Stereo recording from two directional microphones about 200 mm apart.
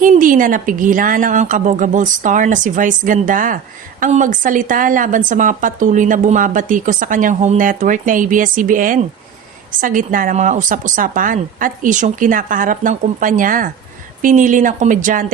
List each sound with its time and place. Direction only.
0.0 s speech: 40° right (ahead or behind)